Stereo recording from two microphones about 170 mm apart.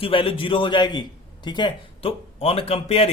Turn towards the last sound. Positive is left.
turn(degrees=35)  # may be behind; listen again after turning